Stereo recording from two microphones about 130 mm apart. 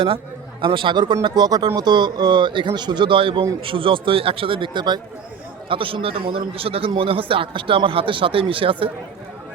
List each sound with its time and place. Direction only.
0.6 s a man's voice: 40° right (ahead or behind)